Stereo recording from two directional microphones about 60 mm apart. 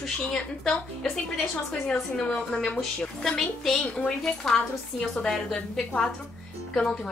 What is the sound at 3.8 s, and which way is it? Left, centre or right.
A woman's voice, centre.